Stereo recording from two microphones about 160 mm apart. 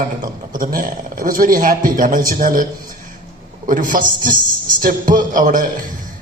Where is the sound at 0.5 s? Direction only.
60° right (ahead or behind).